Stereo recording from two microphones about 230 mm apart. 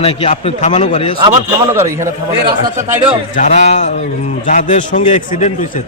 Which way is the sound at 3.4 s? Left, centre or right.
Left.